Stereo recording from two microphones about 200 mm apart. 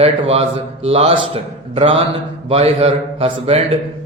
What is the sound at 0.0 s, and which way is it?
Speech, 30° right (ahead or behind).